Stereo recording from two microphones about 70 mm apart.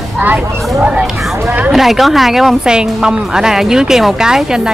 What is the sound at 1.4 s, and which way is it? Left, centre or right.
Speech, right.